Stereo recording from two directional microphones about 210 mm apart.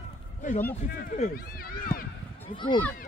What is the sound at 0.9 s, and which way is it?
Speech, 45° left (ahead or behind).